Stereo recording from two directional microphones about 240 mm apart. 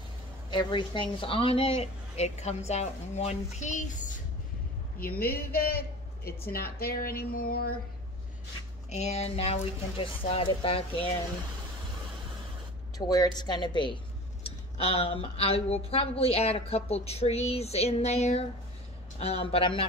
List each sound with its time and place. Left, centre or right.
0.5 s a woman's voice: centre; by 7.7 s left
8.9 s speech: left
12.9 s a woman's voice: centre